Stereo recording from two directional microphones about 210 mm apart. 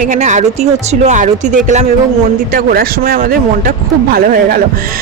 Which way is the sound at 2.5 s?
45° right (ahead or behind).